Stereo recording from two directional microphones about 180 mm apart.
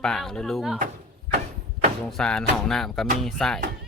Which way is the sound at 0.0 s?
5° left (ahead or behind).